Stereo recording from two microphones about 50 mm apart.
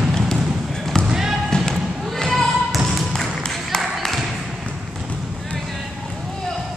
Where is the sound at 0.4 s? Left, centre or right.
Centre.